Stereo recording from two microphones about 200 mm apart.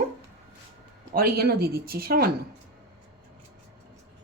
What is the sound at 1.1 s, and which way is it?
Speech, 50° right (ahead or behind).